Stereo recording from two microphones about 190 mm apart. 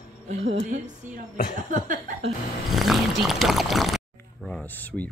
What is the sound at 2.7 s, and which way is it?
Speech, centre (ahead or behind).